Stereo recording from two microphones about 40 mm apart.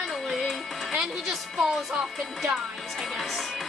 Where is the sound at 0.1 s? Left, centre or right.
Centre.